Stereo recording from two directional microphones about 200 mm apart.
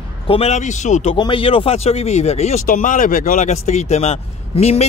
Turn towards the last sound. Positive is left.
turn(degrees=30)  # may be behind; listen again after turning